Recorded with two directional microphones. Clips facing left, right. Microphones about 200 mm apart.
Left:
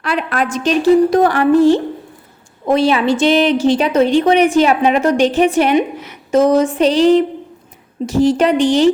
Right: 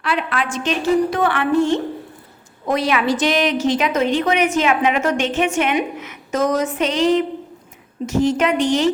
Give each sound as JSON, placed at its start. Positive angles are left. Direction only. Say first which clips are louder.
{"t": 0.0, "sound": "a woman's voice", "louder": "left 4 dB", "side_deg": 40}